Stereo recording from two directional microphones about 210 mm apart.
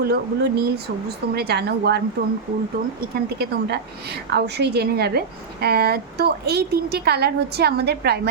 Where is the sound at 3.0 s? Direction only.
50° right (ahead or behind).